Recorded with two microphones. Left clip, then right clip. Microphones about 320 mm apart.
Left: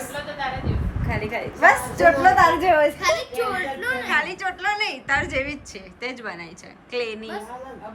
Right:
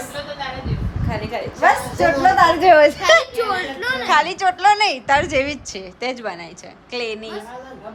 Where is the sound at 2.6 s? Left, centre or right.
Right.